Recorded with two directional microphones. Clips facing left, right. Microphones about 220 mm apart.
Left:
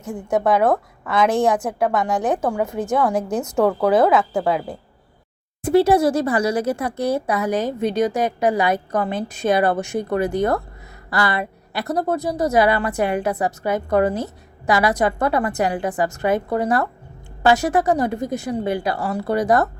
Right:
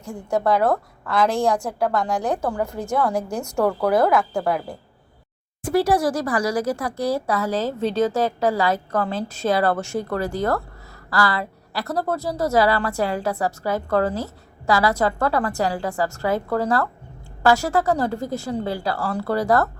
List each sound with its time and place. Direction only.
0.0 s a woman's voice: 20° left (ahead or behind)